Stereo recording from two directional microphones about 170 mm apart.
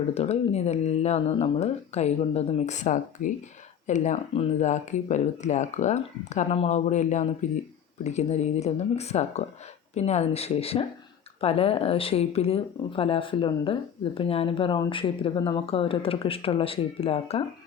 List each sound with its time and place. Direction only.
0.1 s speech: 40° left (ahead or behind)